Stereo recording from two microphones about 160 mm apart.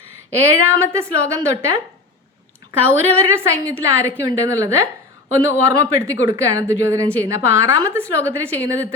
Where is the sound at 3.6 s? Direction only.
15° right (ahead or behind).